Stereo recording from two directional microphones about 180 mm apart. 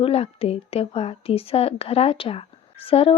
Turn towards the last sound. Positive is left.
turn(degrees=30)  # may be behind; listen again after turning